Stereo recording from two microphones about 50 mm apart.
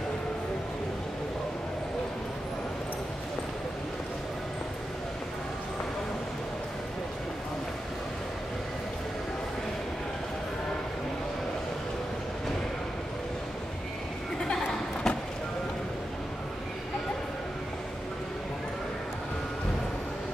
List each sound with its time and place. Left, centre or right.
15.0 s vehicle: centre